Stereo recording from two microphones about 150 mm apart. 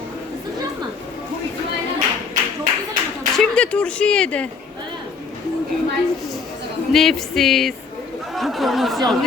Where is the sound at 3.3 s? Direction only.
5° left (ahead or behind).